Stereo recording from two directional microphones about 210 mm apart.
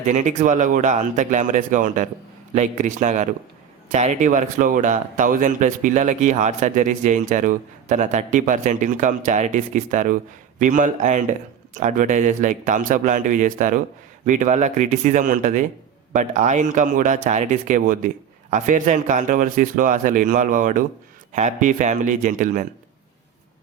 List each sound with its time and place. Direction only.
0.0 s speech: 35° right (ahead or behind)